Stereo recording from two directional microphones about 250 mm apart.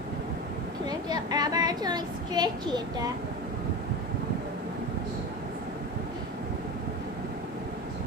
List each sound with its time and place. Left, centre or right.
0.9 s speech: centre